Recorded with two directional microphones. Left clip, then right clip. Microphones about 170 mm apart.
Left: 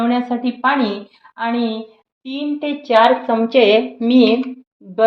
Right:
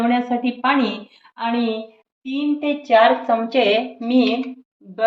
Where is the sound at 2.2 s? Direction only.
45° left (ahead or behind).